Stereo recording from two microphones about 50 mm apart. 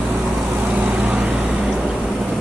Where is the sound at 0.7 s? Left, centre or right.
Right.